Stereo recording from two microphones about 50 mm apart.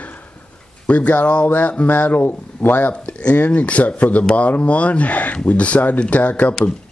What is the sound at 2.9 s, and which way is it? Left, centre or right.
Speech, left.